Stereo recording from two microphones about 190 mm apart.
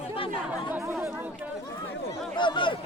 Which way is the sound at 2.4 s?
25° left (ahead or behind).